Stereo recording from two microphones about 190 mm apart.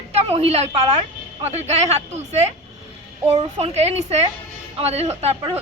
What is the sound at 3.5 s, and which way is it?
A woman's voice, 35° right (ahead or behind).